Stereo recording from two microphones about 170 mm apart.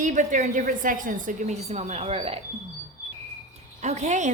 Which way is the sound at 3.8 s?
45° right (ahead or behind).